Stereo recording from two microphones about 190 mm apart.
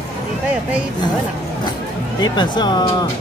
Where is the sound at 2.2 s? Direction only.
25° left (ahead or behind).